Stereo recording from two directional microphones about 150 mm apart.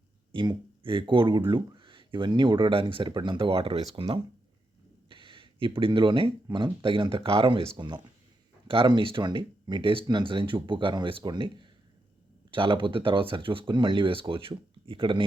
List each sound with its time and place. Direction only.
0.3 s speech: 35° right (ahead or behind)